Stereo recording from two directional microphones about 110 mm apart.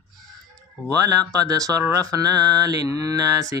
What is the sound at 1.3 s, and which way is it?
Mantra, 35° right (ahead or behind).